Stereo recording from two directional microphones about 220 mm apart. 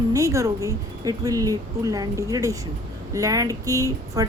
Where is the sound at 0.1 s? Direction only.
15° right (ahead or behind).